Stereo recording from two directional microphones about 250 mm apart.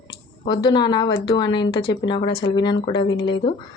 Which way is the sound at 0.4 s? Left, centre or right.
Centre.